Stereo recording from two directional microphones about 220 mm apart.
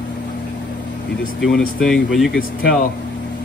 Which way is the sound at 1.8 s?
5° left (ahead or behind).